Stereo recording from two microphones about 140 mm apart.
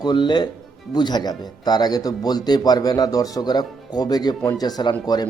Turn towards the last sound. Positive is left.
turn(degrees=30)  # may be behind; listen again after turning